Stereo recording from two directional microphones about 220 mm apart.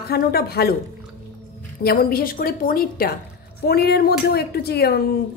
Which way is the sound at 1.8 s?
45° left (ahead or behind).